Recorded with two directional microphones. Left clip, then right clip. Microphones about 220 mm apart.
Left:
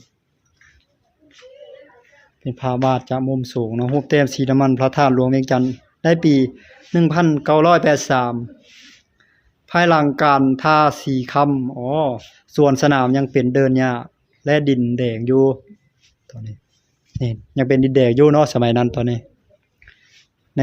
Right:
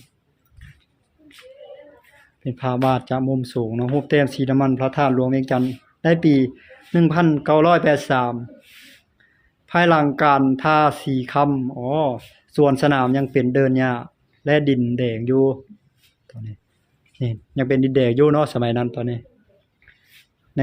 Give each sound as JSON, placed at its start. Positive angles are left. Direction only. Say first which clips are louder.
{"t": 2.4, "sound": "speech", "louder": "left 2 dB", "side_deg": 10}
{"t": 9.6, "sound": "speech", "louder": "left 2 dB", "side_deg": 15}